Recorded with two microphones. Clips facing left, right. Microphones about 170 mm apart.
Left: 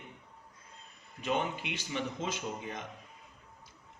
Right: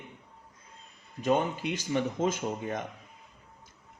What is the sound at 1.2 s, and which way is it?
Speech, 40° right (ahead or behind).